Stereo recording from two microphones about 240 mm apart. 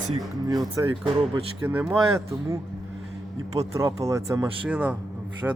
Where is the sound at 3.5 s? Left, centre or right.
Centre.